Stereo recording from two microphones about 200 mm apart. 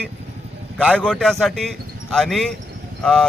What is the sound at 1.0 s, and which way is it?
A man's voice, 5° left (ahead or behind).